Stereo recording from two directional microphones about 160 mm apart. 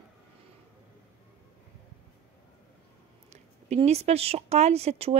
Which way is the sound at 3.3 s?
45° right (ahead or behind).